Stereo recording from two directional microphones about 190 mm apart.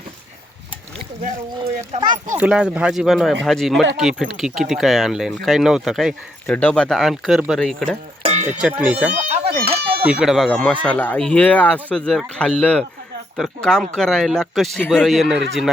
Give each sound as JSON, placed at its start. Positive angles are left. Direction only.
{"t": 1.9, "sound": "speech", "side_deg": -35}
{"t": 2.4, "sound": "speech", "side_deg": -5}
{"t": 8.2, "sound": "music", "side_deg": -35}
{"t": 8.6, "sound": "speech", "side_deg": -5}
{"t": 9.1, "sound": "a sound", "side_deg": -35}
{"t": 10.0, "sound": "speech", "side_deg": -5}